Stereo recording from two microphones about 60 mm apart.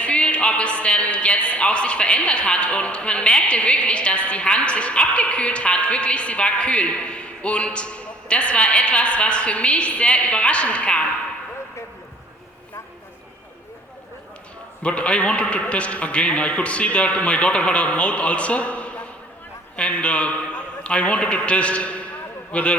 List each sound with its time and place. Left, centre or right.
0.0 s a man's voice: centre
14.8 s a man's voice: left